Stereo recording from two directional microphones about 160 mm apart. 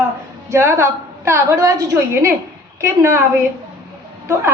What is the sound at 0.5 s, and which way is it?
A woman's voice, 15° right (ahead or behind).